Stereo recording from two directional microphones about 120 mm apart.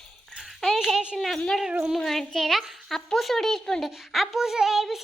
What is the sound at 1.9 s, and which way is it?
Speech, centre (ahead or behind).